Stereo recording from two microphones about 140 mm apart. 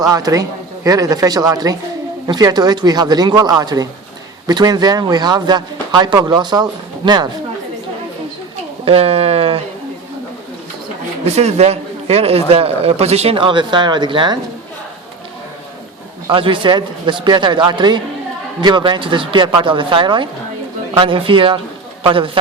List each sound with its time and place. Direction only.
0.0 s speech: 25° right (ahead or behind)
8.8 s a man's voice: 45° right (ahead or behind)
11.3 s a man's voice: 50° right (ahead or behind); by 14.3 s 35° right (ahead or behind)
16.3 s a man's voice: 40° right (ahead or behind)